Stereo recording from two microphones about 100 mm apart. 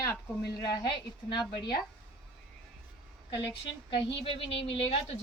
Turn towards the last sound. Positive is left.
turn(degrees=65)  # may be behind; listen again after turning